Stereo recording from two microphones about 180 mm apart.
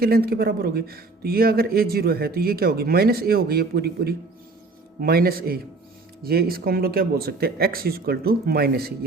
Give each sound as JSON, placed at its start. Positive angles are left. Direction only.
{"t": 0.0, "sound": "speech", "side_deg": -55}